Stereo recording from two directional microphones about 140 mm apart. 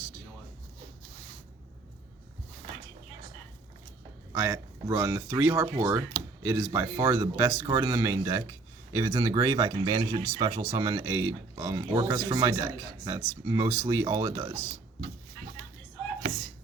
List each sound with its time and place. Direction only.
4.3 s speech: 20° right (ahead or behind)